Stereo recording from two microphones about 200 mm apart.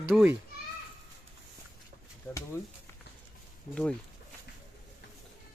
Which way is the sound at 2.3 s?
10° left (ahead or behind).